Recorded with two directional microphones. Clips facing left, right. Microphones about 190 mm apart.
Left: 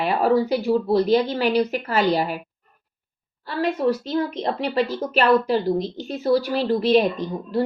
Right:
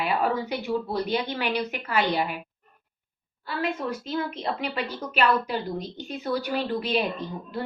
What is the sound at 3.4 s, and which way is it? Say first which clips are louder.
Speech: left 7 dB; 35° left (ahead or behind).